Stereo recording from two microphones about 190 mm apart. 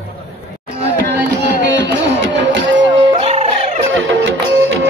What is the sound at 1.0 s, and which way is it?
Music, 65° right (ahead or behind).